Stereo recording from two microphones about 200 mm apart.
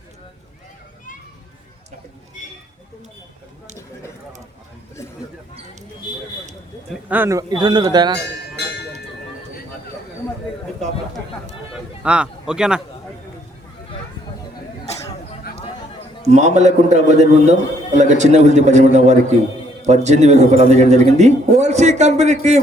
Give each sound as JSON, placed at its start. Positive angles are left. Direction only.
{"t": 6.9, "sound": "speech", "side_deg": -10}
{"t": 8.2, "sound": "cowbell", "side_deg": 55}
{"t": 11.7, "sound": "a man's voice", "side_deg": -5}
{"t": 16.2, "sound": "a man's voice", "side_deg": -35}